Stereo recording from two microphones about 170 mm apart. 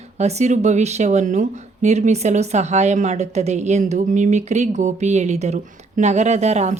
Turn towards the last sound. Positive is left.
turn(degrees=-40)  # may be behind; listen again after turning